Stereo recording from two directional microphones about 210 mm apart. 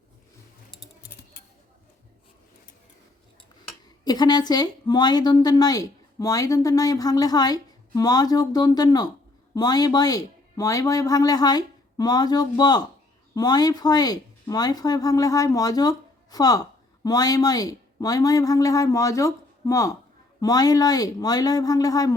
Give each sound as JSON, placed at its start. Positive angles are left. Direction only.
{"t": 4.0, "sound": "a woman's voice", "side_deg": 20}